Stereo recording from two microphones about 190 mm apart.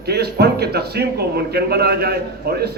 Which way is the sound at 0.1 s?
60° right (ahead or behind).